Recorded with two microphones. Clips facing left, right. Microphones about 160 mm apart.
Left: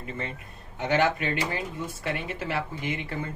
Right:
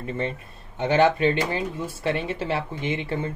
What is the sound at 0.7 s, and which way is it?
Speech, 25° right (ahead or behind).